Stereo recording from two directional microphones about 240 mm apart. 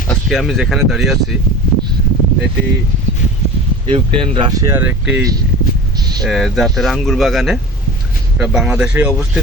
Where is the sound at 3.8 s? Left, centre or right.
Right; by 5.3 s centre.